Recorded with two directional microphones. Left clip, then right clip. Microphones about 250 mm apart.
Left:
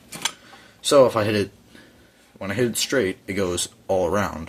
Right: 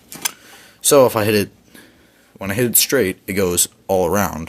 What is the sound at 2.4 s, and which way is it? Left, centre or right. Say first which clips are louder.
Speech: right 4 dB; right.